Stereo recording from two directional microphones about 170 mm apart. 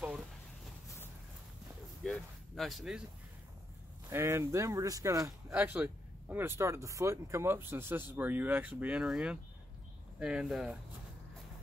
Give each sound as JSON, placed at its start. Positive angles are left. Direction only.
{"t": 2.0, "sound": "a sound", "side_deg": 0}
{"t": 4.1, "sound": "speech", "side_deg": -15}
{"t": 5.5, "sound": "speech", "side_deg": -10}